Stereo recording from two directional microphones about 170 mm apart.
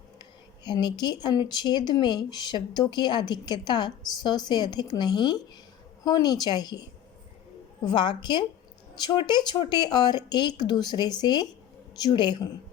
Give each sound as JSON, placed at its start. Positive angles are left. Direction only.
{"t": 0.6, "sound": "speech", "side_deg": 25}